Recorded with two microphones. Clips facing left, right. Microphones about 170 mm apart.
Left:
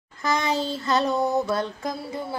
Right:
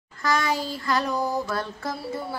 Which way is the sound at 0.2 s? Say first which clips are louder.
Left 1 dB; 20° left (ahead or behind).